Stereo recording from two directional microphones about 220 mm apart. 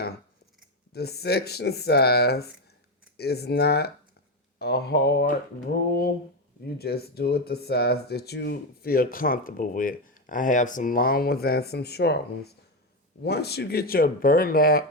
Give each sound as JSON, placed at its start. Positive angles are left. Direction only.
{"t": 0.9, "sound": "speech", "side_deg": 45}
{"t": 6.7, "sound": "speech", "side_deg": 45}